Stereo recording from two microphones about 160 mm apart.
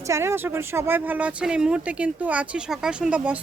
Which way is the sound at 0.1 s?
15° right (ahead or behind).